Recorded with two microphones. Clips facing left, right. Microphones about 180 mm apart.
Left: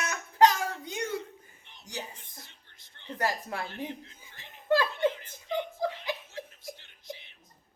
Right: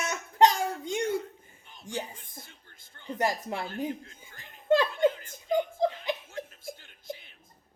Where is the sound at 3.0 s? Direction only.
20° right (ahead or behind).